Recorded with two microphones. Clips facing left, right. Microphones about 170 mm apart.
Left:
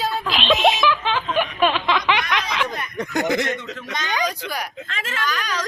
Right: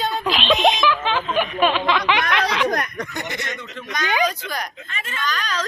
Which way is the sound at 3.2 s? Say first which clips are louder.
Left 11 dB; 90° left.